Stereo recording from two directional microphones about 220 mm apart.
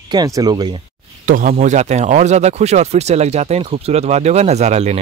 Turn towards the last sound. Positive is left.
turn(degrees=-30)  # may be behind; listen again after turning